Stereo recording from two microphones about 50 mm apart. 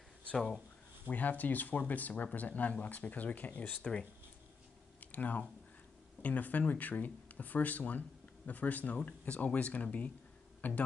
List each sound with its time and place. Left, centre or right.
1.1 s speech: left
3.8 s speech: centre
5.0 s speech: left